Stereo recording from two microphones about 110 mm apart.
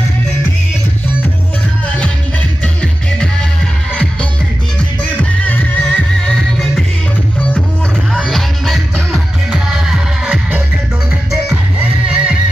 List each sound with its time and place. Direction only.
2.6 s music: 10° left (ahead or behind)
8.1 s music: centre (ahead or behind)